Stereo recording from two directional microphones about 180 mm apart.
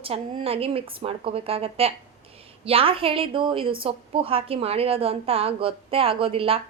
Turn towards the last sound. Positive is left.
turn(degrees=-30)  # may be behind; listen again after turning